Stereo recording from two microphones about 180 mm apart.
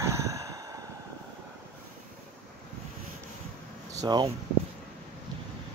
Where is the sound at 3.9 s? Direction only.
20° right (ahead or behind).